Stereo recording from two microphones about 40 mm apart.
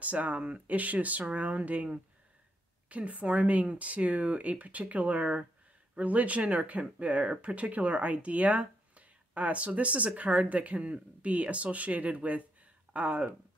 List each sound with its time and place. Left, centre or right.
0.0 s speech: right
2.9 s speech: right